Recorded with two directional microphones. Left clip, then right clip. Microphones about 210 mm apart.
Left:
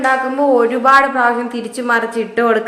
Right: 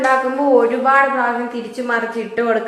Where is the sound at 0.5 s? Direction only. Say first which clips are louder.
Left 2 dB; 35° left (ahead or behind).